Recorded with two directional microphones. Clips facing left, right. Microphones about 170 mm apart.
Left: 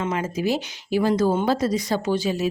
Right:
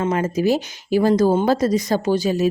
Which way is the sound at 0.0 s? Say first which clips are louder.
Right 5 dB; 45° right (ahead or behind).